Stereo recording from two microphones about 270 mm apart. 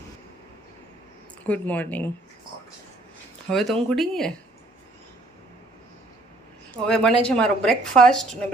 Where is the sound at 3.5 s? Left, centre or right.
Centre.